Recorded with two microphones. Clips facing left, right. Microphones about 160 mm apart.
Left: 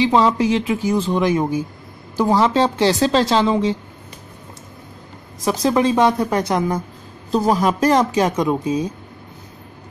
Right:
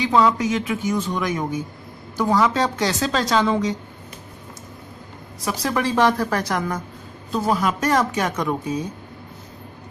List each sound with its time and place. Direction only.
0.0 s speech: 30° left (ahead or behind)
5.4 s speech: 25° left (ahead or behind)
7.3 s speech: 35° left (ahead or behind)